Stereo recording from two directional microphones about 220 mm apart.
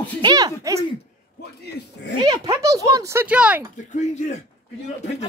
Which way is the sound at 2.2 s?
15° right (ahead or behind).